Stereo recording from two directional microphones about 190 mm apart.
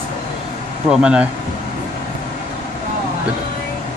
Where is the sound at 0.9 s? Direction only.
5° right (ahead or behind).